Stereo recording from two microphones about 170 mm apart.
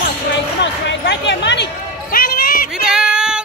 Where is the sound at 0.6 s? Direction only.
90° left; by 2.7 s 55° left (ahead or behind).